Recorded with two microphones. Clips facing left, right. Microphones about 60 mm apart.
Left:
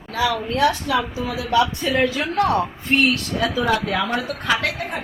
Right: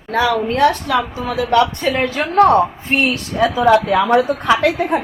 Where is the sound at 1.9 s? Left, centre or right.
Right.